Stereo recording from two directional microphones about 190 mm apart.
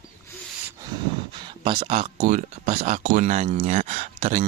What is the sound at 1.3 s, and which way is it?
Speech, 25° right (ahead or behind).